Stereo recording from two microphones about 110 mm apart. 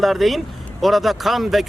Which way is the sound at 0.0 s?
Centre (ahead or behind).